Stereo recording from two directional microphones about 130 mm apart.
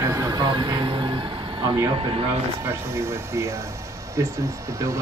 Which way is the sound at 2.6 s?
20° right (ahead or behind).